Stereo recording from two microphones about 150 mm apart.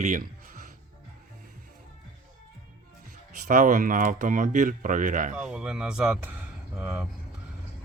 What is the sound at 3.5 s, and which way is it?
Speech, 65° right (ahead or behind).